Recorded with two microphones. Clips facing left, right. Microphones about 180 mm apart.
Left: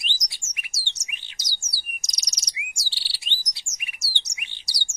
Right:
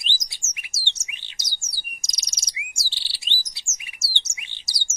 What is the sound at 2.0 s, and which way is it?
Chirp, 25° right (ahead or behind).